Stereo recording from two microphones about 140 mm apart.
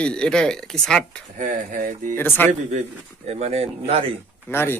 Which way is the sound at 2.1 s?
15° left (ahead or behind).